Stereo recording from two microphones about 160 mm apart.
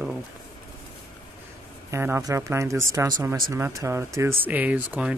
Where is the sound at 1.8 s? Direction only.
15° right (ahead or behind).